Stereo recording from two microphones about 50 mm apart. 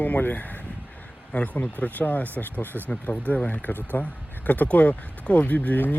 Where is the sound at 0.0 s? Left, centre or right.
Left.